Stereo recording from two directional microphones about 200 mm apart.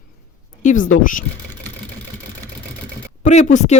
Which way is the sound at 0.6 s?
40° left (ahead or behind).